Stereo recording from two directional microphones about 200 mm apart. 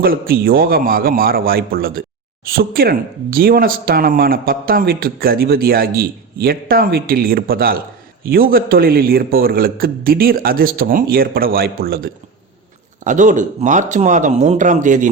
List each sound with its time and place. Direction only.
0.0 s speech: 45° right (ahead or behind)